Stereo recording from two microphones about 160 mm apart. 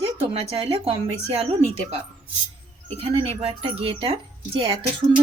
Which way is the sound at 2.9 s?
40° right (ahead or behind).